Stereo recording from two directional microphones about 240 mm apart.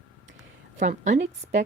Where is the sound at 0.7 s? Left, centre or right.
Right.